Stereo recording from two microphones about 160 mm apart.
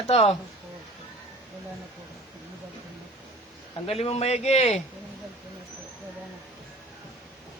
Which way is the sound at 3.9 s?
40° left (ahead or behind).